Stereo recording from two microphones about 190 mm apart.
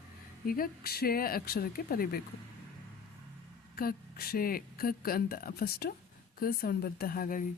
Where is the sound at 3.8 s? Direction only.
50° left (ahead or behind).